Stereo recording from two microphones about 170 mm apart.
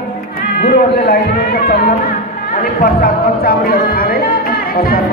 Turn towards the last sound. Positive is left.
turn(degrees=60)  # may be behind; listen again after turning